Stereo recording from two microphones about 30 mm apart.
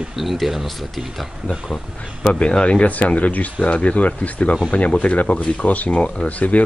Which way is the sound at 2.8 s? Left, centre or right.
Left.